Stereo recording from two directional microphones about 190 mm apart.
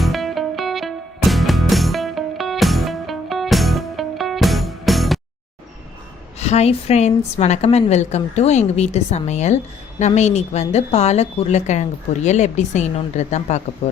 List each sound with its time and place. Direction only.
0.0 s music: centre (ahead or behind)
6.4 s speech: 35° left (ahead or behind)